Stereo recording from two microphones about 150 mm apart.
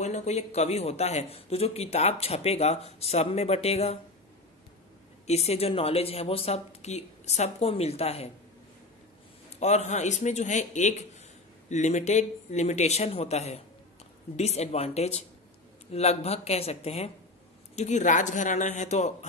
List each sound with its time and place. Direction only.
0.0 s speech: 50° left (ahead or behind)
5.2 s speech: 45° left (ahead or behind)
9.6 s speech: 50° left (ahead or behind)